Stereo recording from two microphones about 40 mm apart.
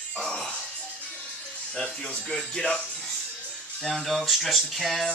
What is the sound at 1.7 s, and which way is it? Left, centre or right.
Speech, centre.